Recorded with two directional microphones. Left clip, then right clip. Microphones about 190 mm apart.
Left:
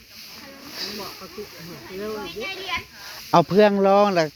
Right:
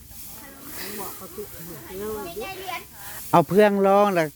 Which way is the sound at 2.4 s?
15° right (ahead or behind).